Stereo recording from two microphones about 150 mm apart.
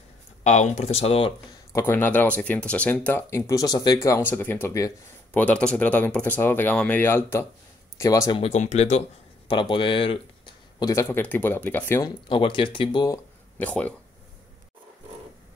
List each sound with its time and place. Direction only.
0.4 s speech: 50° left (ahead or behind)
1.7 s speech: 15° left (ahead or behind)
8.4 s speech: 50° left (ahead or behind)
9.5 s speech: 35° left (ahead or behind); by 12.1 s 15° left (ahead or behind)
12.3 s speech: 35° left (ahead or behind)
13.1 s speech: 10° left (ahead or behind)